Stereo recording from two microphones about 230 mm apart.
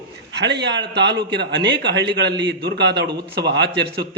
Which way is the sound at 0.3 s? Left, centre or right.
Right.